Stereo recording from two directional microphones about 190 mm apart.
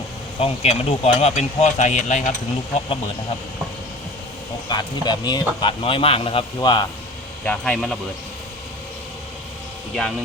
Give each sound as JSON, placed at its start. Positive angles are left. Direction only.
{"t": 0.3, "sound": "speech", "side_deg": 30}
{"t": 4.7, "sound": "speech", "side_deg": 25}
{"t": 7.4, "sound": "speech", "side_deg": 5}
{"t": 9.9, "sound": "speech", "side_deg": 0}